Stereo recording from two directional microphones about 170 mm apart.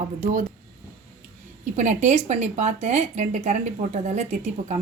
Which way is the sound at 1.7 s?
45° right (ahead or behind).